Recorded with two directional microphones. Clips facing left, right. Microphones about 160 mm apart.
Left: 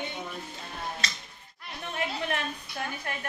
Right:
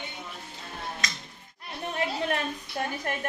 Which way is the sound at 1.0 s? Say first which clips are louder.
Right 1 dB; 30° left (ahead or behind).